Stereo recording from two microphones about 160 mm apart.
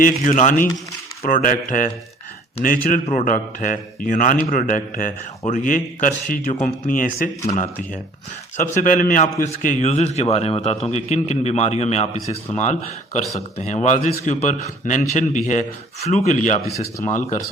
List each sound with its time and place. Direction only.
0.0 s a man's voice: 50° left (ahead or behind)
13.3 s a man's voice: 45° left (ahead or behind)